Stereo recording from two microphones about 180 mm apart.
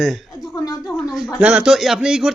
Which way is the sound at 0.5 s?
20° left (ahead or behind).